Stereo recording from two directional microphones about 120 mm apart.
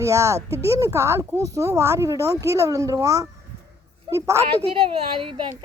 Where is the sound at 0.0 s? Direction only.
25° right (ahead or behind).